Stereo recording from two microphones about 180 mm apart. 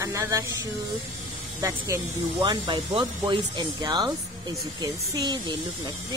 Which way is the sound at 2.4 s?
20° right (ahead or behind).